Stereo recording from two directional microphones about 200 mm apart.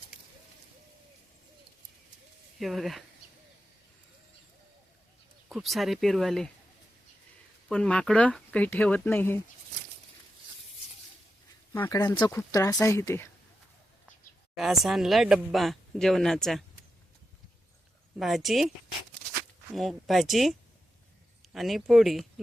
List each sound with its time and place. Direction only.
2.6 s speech: centre (ahead or behind)
5.5 s speech: centre (ahead or behind)
7.7 s speech: 5° left (ahead or behind)
11.7 s speech: 15° left (ahead or behind)
14.5 s speech: centre (ahead or behind)
18.2 s speech: centre (ahead or behind)
19.7 s speech: centre (ahead or behind)